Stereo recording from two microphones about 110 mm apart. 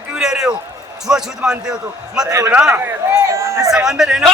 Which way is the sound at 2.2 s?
30° right (ahead or behind).